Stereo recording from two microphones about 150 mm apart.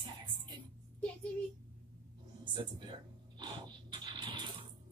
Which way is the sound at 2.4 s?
30° right (ahead or behind).